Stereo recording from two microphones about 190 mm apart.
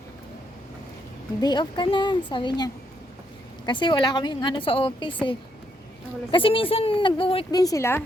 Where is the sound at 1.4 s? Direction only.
25° left (ahead or behind).